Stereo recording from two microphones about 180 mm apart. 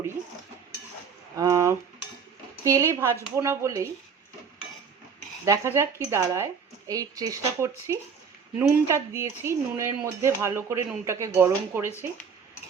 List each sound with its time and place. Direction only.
1.4 s a sound: 20° right (ahead or behind)
2.6 s speech: 15° right (ahead or behind)
5.5 s speech: 15° right (ahead or behind)